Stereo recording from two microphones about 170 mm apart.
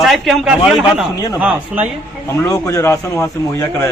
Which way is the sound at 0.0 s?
Centre (ahead or behind).